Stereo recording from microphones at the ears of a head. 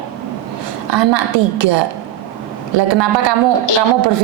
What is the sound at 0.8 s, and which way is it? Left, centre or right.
A woman's voice, right.